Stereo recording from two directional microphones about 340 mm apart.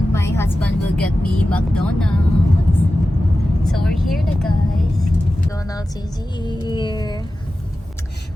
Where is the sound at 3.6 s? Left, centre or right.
Centre.